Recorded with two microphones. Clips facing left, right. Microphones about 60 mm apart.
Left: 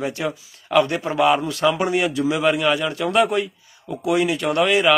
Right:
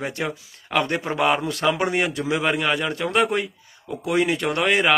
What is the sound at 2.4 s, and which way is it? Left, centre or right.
A man's voice, right.